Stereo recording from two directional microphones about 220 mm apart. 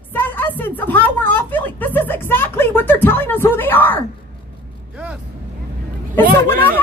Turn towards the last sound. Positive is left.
turn(degrees=-40)  # may be behind; listen again after turning